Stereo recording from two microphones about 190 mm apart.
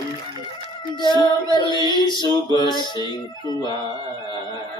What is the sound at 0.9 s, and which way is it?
Music, 25° left (ahead or behind).